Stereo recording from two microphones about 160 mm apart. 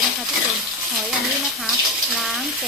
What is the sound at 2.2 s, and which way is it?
Speech, centre (ahead or behind).